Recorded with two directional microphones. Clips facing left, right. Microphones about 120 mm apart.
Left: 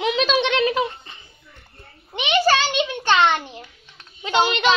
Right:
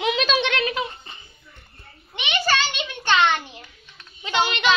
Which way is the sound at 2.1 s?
35° left (ahead or behind).